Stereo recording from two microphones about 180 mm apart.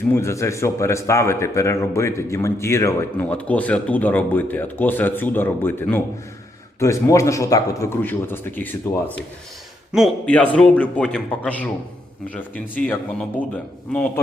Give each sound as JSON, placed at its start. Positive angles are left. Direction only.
{"t": 0.1, "sound": "a man's voice", "side_deg": 15}
{"t": 9.9, "sound": "a man's voice", "side_deg": 5}